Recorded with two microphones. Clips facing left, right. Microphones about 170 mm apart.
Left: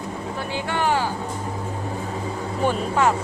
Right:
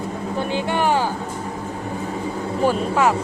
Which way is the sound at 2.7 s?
10° right (ahead or behind).